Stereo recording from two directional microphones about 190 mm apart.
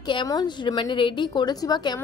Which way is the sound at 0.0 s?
25° left (ahead or behind).